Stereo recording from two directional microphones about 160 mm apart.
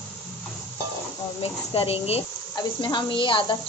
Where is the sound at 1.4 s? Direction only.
35° left (ahead or behind).